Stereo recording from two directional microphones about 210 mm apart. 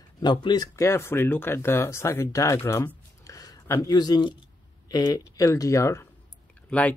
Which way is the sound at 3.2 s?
15° left (ahead or behind).